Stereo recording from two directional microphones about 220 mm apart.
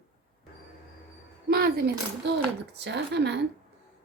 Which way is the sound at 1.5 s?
45° right (ahead or behind).